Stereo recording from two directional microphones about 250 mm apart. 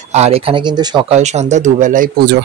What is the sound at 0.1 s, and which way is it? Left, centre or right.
Speech, right.